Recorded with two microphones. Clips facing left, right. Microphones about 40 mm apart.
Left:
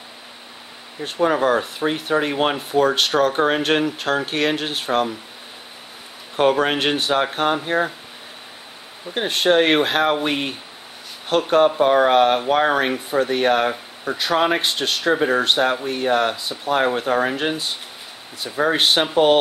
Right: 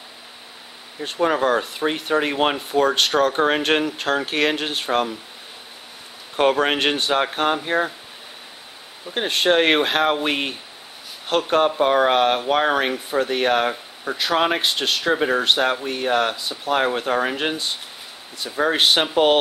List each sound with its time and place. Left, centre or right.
1.0 s speech: centre
6.3 s speech: centre
9.1 s speech: centre